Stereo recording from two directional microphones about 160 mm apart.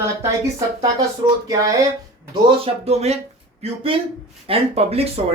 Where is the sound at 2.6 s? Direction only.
40° right (ahead or behind).